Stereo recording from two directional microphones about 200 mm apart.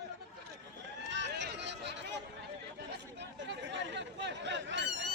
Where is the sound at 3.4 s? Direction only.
60° right (ahead or behind).